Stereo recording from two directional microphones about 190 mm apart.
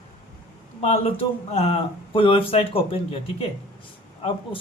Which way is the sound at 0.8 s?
30° left (ahead or behind).